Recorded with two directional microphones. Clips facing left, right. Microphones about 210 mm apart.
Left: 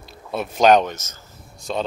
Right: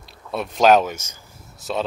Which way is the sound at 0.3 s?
Centre (ahead or behind).